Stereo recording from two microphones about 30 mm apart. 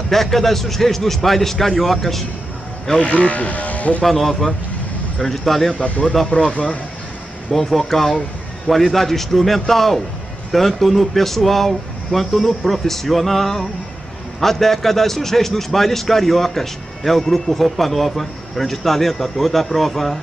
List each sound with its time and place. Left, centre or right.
0.1 s speech: centre
3.0 s speech: left
4.0 s speech: centre
5.8 s speech: left
7.5 s speech: centre